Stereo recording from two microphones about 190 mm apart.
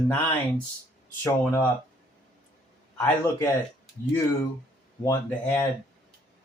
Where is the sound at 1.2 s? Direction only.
15° left (ahead or behind).